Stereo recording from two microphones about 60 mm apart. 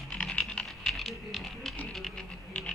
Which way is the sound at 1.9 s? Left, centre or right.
Centre.